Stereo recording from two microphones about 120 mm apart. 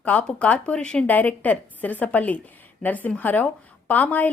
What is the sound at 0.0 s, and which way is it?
A woman's voice, 10° left (ahead or behind).